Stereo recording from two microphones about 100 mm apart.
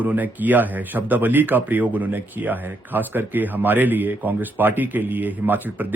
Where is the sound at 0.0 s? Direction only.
15° right (ahead or behind).